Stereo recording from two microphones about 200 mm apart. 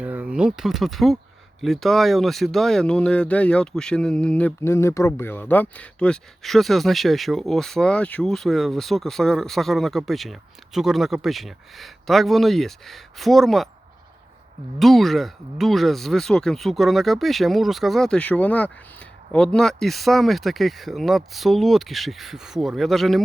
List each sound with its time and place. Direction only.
0.0 s speech: 5° right (ahead or behind)
14.8 s speech: centre (ahead or behind)